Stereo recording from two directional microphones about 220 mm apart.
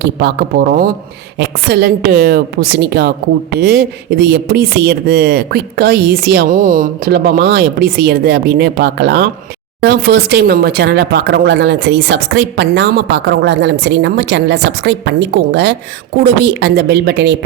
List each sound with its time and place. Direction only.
0.0 s speech: 45° right (ahead or behind)